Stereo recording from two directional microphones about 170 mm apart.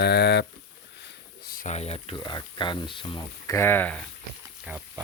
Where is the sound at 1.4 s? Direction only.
55° left (ahead or behind).